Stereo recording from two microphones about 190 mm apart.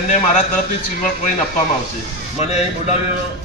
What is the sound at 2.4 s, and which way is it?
Speech, 35° left (ahead or behind).